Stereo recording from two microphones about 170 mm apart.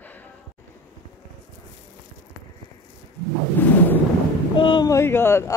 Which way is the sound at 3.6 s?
10° left (ahead or behind).